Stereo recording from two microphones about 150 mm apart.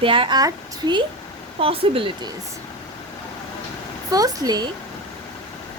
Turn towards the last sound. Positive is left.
turn(degrees=-25)  # may be behind; listen again after turning